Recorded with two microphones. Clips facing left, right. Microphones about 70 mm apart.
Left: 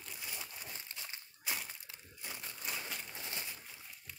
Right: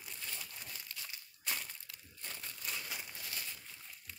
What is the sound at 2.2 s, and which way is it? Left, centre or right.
Crumpling, centre.